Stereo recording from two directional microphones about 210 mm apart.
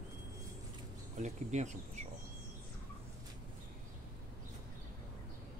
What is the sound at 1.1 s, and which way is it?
Speech, 35° right (ahead or behind).